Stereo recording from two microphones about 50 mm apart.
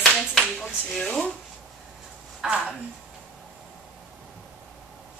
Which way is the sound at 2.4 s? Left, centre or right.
Centre.